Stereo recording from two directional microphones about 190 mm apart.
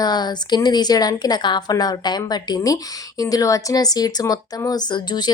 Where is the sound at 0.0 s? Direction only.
20° left (ahead or behind).